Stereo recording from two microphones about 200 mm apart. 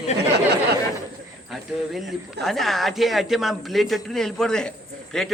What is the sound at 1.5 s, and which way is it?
A man's voice, centre (ahead or behind).